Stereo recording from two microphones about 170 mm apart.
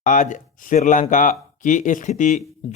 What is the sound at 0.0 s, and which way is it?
Speech, 50° left (ahead or behind).